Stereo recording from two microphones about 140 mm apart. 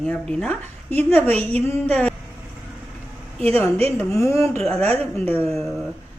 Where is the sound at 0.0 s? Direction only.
5° left (ahead or behind).